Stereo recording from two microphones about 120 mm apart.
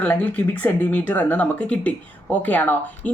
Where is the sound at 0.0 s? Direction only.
15° left (ahead or behind).